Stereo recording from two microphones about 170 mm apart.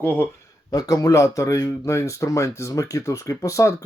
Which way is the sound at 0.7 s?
20° left (ahead or behind).